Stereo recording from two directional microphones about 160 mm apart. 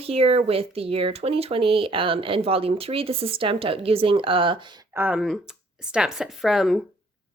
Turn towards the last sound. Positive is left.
turn(degrees=0)  # may be behind; listen again after turning